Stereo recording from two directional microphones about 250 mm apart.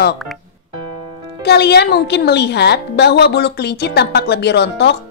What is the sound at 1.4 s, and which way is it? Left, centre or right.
A woman's voice, left.